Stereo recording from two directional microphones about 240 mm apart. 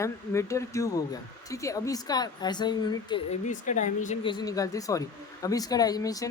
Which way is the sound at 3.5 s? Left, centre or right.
Left.